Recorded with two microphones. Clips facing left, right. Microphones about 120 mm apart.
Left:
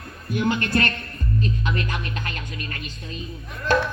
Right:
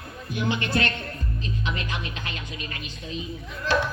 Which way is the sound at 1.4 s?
50° left (ahead or behind).